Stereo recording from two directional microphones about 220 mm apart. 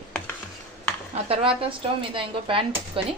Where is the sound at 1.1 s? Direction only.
25° right (ahead or behind).